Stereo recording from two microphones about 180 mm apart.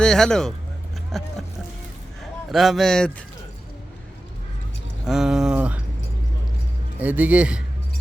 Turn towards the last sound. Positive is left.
turn(degrees=-5)  # may be behind; listen again after turning